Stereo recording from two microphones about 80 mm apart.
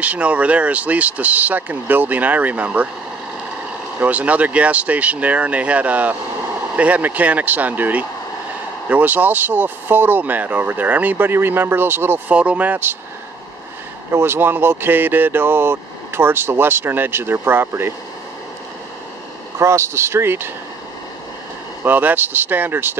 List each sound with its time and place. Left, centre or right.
0.0 s speech: centre
4.0 s speech: centre
12.4 s speech: centre
14.1 s speech: right
19.6 s speech: right
21.8 s speech: right